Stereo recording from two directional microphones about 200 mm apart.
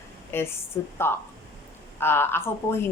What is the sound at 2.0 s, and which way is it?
Speech, 10° left (ahead or behind).